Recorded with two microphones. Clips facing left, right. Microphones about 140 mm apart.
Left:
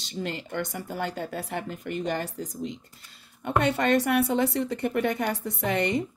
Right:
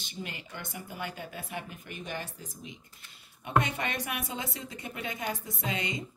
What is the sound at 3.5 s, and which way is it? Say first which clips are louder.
A woman's voice: left 7 dB; 70° left (ahead or behind).